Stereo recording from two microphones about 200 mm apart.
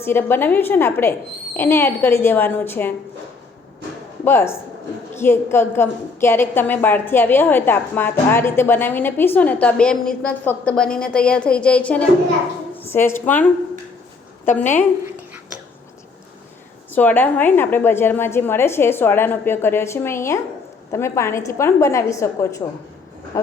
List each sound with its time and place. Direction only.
0.0 s a woman's voice: 10° left (ahead or behind)
4.2 s a woman's voice: 10° left (ahead or behind)
14.5 s a woman's voice: 35° left (ahead or behind)
16.9 s a woman's voice: 10° left (ahead or behind)